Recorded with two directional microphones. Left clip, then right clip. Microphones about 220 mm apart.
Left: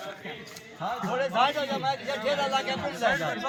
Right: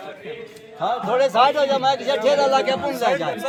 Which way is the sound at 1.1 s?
30° right (ahead or behind).